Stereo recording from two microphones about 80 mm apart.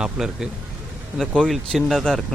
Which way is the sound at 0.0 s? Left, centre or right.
Centre.